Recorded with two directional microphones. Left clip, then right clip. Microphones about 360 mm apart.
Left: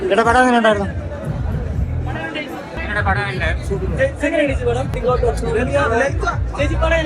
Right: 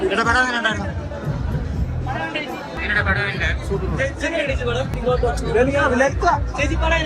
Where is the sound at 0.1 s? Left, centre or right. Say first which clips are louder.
Left 8 dB; centre.